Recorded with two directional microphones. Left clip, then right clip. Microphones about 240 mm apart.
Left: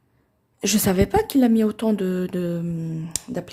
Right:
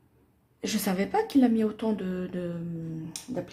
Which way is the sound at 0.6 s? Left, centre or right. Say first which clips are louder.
Left 9 dB; left.